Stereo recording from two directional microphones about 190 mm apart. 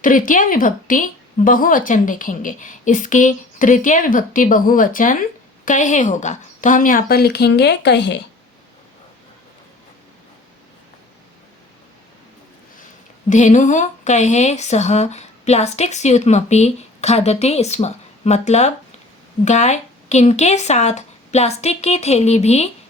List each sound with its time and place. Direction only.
0.0 s speech: 45° left (ahead or behind); by 8.2 s 65° left (ahead or behind)
13.3 s speech: 40° left (ahead or behind)